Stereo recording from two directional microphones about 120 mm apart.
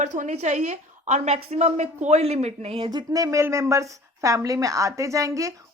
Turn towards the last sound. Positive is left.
turn(degrees=-25)  # may be behind; listen again after turning